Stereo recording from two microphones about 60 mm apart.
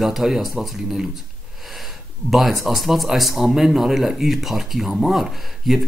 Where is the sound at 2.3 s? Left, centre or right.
Centre.